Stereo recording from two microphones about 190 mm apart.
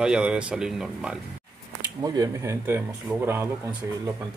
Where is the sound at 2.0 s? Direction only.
20° right (ahead or behind).